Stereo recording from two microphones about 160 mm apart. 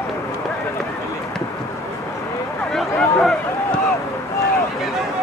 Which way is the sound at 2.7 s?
Centre (ahead or behind).